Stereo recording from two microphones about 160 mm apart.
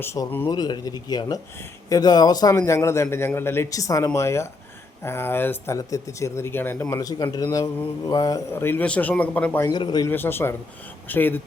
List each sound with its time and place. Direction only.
0.0 s a man's voice: 15° left (ahead or behind)
9.6 s a man's voice: 25° left (ahead or behind)
10.1 s speech: 15° left (ahead or behind)